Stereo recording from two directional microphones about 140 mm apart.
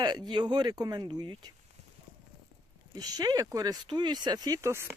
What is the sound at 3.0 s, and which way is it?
Speech, 25° right (ahead or behind).